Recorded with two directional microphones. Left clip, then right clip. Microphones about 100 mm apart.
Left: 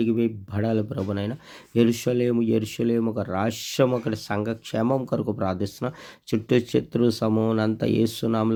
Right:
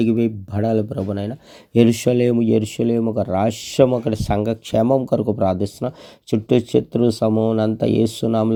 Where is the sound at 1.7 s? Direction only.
45° right (ahead or behind).